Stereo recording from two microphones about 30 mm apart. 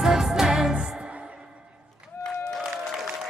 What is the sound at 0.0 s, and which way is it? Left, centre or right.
Music, centre.